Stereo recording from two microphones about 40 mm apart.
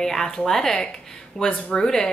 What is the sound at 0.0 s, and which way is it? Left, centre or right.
A woman's voice, centre.